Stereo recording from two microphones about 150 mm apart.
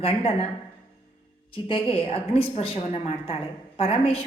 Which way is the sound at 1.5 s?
35° left (ahead or behind).